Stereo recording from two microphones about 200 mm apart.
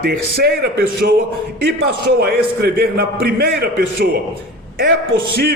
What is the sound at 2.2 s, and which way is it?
A man's voice, 50° right (ahead or behind).